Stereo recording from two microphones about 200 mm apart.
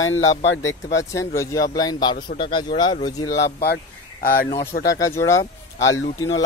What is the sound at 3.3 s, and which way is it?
Speech, 55° left (ahead or behind).